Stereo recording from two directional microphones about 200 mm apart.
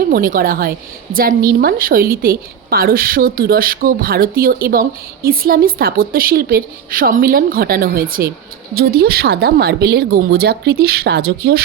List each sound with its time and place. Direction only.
0.0 s a woman's voice: 45° right (ahead or behind)